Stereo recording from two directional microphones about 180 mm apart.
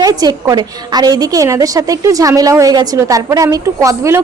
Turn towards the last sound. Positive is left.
turn(degrees=-15)  # may be behind; listen again after turning